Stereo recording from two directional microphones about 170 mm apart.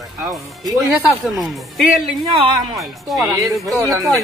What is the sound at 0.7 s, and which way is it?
Speech, centre (ahead or behind).